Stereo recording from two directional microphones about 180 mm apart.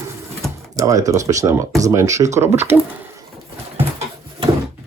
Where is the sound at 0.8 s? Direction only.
20° right (ahead or behind).